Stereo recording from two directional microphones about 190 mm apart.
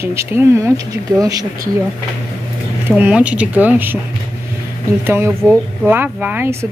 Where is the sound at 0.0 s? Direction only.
15° right (ahead or behind).